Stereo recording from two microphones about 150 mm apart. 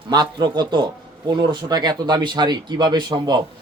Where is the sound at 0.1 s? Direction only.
30° right (ahead or behind).